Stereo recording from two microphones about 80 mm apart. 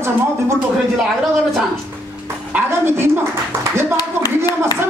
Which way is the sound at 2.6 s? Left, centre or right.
Right.